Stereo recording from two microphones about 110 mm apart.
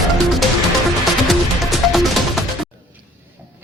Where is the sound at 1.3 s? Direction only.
Centre (ahead or behind).